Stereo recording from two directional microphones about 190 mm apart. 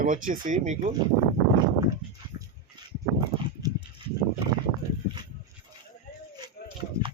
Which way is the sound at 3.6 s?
20° right (ahead or behind).